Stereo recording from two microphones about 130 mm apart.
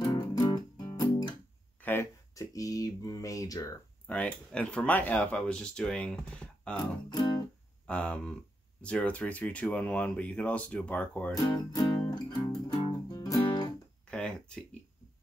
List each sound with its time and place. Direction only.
0.0 s music: 30° left (ahead or behind)
1.8 s speech: 15° left (ahead or behind)
4.1 s speech: 10° left (ahead or behind)
7.1 s music: 30° left (ahead or behind)
7.8 s speech: 10° left (ahead or behind)
11.4 s speech: 30° left (ahead or behind)
12.0 s music: 30° left (ahead or behind)
14.1 s a sound: 5° left (ahead or behind)